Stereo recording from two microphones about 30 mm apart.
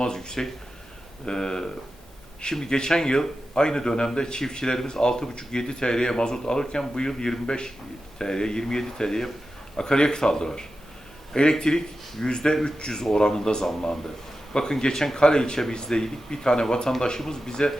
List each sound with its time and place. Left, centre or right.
0.0 s a man's voice: left